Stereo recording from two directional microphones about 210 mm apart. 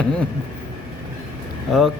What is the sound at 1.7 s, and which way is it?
Speech, centre (ahead or behind).